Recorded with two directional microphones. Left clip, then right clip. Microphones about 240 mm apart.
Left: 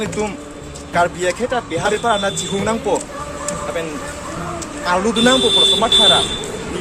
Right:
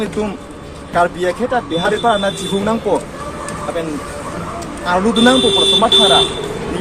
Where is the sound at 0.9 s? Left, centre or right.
Centre.